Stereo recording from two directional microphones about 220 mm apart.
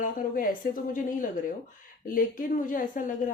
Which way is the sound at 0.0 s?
40° left (ahead or behind).